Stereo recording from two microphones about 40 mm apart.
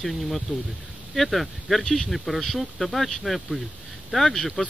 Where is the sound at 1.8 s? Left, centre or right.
Centre.